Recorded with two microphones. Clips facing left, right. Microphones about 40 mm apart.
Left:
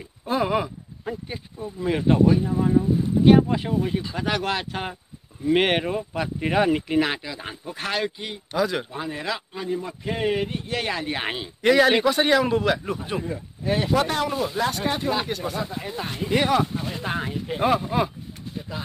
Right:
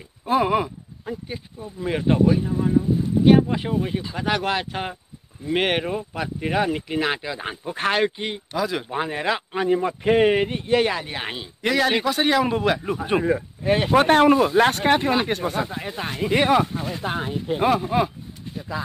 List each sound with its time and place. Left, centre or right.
0.2 s groan: centre
1.0 s speech: centre
1.8 s speech: centre
7.2 s speech: centre
8.5 s speech: centre
8.9 s speech: right
10.7 s speech: centre
11.1 s speech: centre
13.7 s speech: right
15.0 s speech: right
16.3 s speech: centre
17.6 s speech: centre